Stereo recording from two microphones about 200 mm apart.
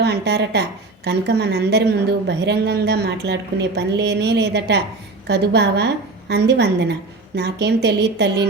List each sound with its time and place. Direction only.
0.0 s a woman's voice: 55° right (ahead or behind)